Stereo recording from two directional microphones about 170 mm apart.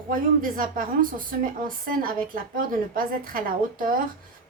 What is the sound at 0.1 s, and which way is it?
A woman's voice, 55° right (ahead or behind).